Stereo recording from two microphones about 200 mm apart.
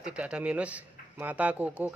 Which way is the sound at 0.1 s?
5° right (ahead or behind).